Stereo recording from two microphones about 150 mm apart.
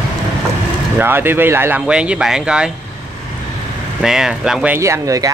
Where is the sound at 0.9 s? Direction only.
15° right (ahead or behind).